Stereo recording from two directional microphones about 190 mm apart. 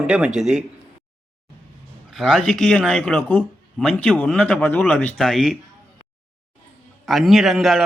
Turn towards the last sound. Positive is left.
turn(degrees=0)  # may be behind; listen again after turning